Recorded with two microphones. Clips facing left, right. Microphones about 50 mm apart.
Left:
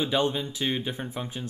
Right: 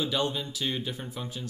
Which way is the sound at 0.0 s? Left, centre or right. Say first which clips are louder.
Left 3 dB; left.